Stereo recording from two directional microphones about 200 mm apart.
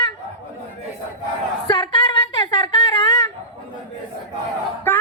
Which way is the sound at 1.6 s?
20° left (ahead or behind).